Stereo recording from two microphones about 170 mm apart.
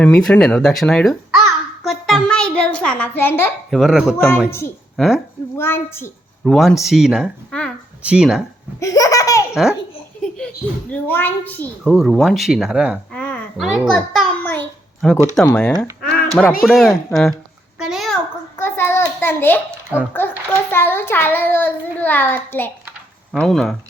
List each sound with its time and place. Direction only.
0.0 s a child's voice: 5° left (ahead or behind)
3.7 s a woman's voice: centre (ahead or behind)
5.5 s a child's voice: 15° left (ahead or behind)
6.4 s speech: 5° left (ahead or behind)
8.8 s laughter: 20° left (ahead or behind)
10.2 s a child's voice: 5° left (ahead or behind)
11.8 s speech: 5° right (ahead or behind)
13.1 s a woman's voice: 10° left (ahead or behind)
13.6 s a child's voice: centre (ahead or behind)
17.7 s a sound: centre (ahead or behind)
18.5 s a sound: 15° left (ahead or behind)
20.1 s a child's voice: 10° left (ahead or behind)
23.3 s speech: centre (ahead or behind)